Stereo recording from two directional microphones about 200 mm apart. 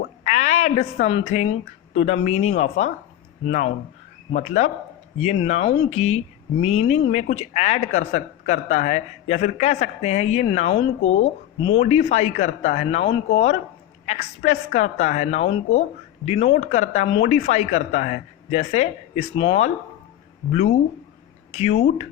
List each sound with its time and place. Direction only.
0.3 s a woman's voice: 35° left (ahead or behind)